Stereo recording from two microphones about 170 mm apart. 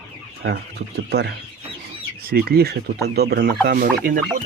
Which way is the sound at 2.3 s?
65° right (ahead or behind).